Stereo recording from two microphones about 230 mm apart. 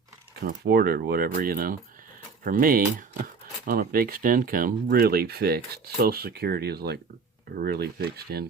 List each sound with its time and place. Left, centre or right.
0.4 s speech: right